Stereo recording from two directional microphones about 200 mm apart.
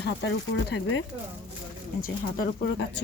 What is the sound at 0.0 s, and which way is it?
Speech, 60° left (ahead or behind).